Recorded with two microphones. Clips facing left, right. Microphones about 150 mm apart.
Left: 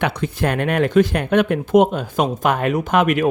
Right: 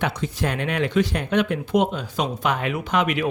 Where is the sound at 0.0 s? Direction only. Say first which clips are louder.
Left 4 dB; 60° left (ahead or behind).